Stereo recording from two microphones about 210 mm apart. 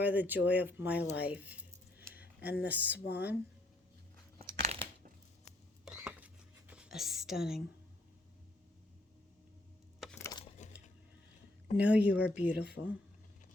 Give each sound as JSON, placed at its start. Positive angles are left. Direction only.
{"t": 0.0, "sound": "speech", "side_deg": -10}
{"t": 2.0, "sound": "a sound", "side_deg": -10}
{"t": 2.6, "sound": "speech", "side_deg": -5}
{"t": 4.4, "sound": "crushing", "side_deg": -30}
{"t": 5.8, "sound": "a sound", "side_deg": -5}
{"t": 11.8, "sound": "speech", "side_deg": -5}